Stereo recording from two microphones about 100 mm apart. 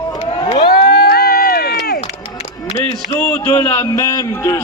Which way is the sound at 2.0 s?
85° left.